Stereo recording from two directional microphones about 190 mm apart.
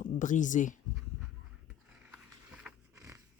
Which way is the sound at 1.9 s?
5° right (ahead or behind).